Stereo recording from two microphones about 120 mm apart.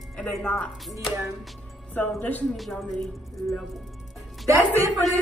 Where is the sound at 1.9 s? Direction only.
15° left (ahead or behind).